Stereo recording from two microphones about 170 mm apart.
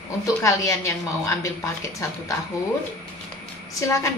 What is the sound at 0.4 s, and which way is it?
A woman's voice, 20° left (ahead or behind).